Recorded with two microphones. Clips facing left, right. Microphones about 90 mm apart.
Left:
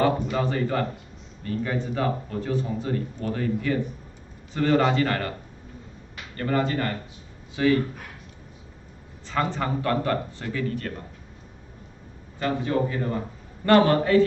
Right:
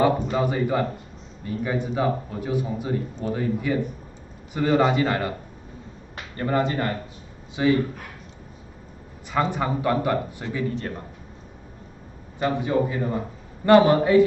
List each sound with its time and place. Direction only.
0.0 s speech: 15° right (ahead or behind)
6.3 s speech: 20° right (ahead or behind)
9.3 s speech: 15° right (ahead or behind)
12.4 s speech: 20° right (ahead or behind)